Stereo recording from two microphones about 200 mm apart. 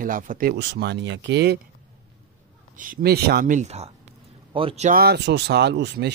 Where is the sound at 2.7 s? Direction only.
45° right (ahead or behind); by 4.9 s 30° right (ahead or behind).